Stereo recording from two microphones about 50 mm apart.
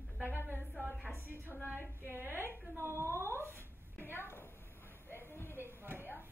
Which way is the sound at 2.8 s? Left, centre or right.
Right.